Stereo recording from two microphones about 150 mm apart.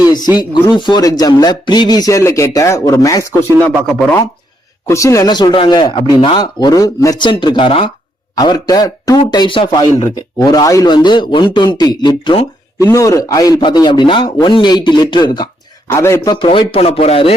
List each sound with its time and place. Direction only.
0.1 s speech: 25° left (ahead or behind)
4.9 s speech: 20° left (ahead or behind); by 7.9 s 35° left (ahead or behind)
8.4 s speech: 25° left (ahead or behind)
12.8 s speech: 20° left (ahead or behind)
15.9 s speech: 20° left (ahead or behind)
16.3 s speech: 30° left (ahead or behind)